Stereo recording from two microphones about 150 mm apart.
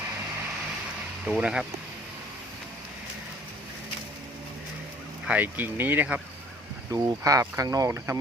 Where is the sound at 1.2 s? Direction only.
5° right (ahead or behind).